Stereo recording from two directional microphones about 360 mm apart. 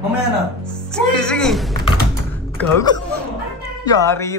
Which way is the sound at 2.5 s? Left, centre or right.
Centre.